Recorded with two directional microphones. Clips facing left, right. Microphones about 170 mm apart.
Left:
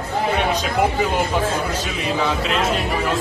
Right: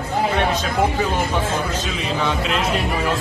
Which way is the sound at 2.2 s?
Centre (ahead or behind).